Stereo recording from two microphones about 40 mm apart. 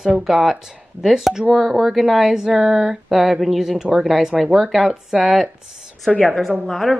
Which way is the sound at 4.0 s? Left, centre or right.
Centre.